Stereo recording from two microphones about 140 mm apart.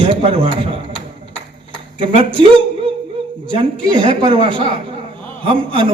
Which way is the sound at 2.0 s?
40° right (ahead or behind).